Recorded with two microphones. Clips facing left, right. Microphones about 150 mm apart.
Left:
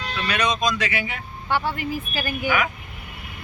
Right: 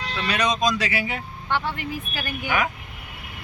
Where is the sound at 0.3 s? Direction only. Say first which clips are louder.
Right 1 dB; 40° right (ahead or behind).